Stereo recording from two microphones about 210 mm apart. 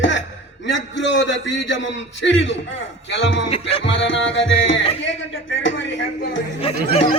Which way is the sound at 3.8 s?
60° left (ahead or behind).